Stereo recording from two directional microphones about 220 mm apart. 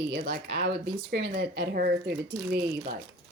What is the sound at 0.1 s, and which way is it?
Speech, 50° right (ahead or behind).